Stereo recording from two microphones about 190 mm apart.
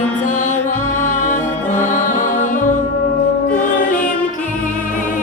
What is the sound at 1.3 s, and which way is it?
Music, 40° left (ahead or behind).